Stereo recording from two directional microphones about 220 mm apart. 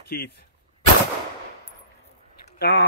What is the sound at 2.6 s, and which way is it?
Speech, 50° left (ahead or behind).